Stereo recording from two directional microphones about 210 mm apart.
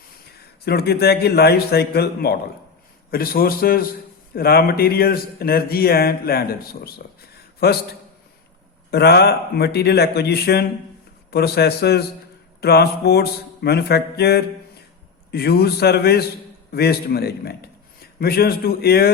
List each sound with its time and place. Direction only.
0.6 s speech: 50° left (ahead or behind)
8.9 s a man's voice: 50° left (ahead or behind)